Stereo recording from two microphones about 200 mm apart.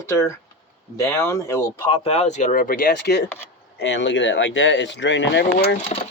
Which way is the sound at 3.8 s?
65° left (ahead or behind).